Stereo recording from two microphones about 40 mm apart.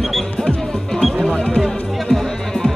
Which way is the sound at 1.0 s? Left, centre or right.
Centre.